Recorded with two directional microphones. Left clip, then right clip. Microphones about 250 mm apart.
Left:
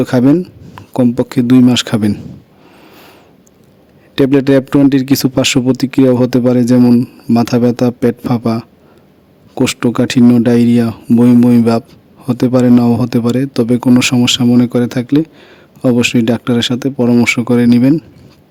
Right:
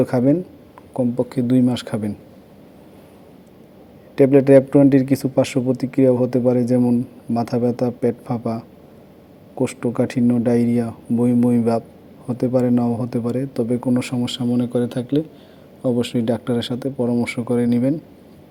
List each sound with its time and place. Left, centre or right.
0.0 s speech: left
4.1 s speech: left